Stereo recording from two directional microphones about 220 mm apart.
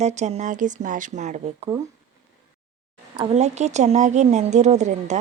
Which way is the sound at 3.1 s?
25° right (ahead or behind).